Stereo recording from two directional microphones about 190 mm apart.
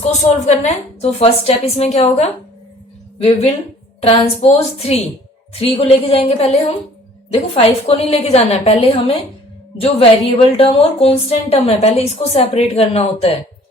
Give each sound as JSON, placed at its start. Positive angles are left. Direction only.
{"t": 0.0, "sound": "a woman's voice", "side_deg": 35}